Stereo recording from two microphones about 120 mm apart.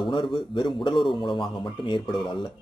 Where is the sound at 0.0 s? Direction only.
40° left (ahead or behind).